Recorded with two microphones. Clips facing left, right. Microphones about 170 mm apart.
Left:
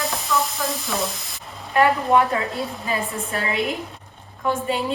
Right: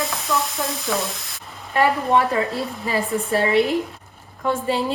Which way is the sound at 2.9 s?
30° right (ahead or behind).